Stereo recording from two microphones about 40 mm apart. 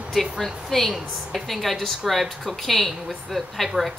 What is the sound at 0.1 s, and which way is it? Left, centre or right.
A woman's voice, centre.